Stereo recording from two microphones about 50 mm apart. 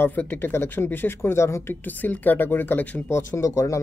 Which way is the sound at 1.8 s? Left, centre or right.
Left.